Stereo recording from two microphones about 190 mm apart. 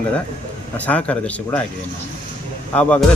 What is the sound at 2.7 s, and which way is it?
Speech, 5° left (ahead or behind).